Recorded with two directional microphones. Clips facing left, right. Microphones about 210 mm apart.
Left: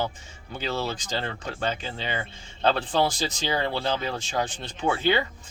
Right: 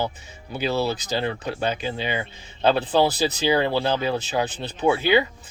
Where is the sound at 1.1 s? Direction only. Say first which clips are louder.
Right 5 dB; 15° right (ahead or behind).